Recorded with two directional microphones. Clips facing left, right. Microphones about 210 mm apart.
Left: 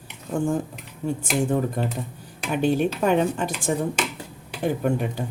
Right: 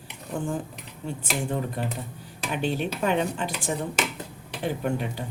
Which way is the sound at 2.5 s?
45° left (ahead or behind).